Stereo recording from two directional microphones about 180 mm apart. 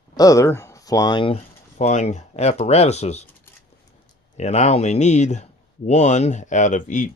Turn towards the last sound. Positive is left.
turn(degrees=45)  # may be behind; listen again after turning